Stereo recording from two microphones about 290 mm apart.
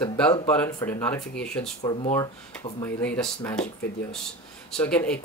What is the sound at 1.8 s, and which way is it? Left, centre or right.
Speech, centre.